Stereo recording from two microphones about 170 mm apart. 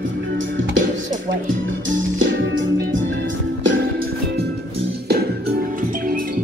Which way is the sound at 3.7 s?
70° right (ahead or behind).